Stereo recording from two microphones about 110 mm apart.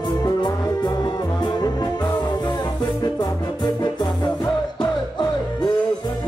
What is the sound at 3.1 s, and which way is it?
Music, 40° left (ahead or behind).